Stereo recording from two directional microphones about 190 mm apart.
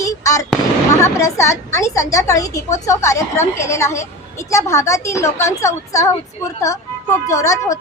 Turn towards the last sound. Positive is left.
turn(degrees=15)  # may be behind; listen again after turning